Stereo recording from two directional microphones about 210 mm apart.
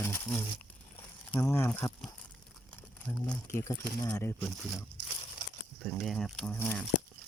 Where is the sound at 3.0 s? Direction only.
5° left (ahead or behind).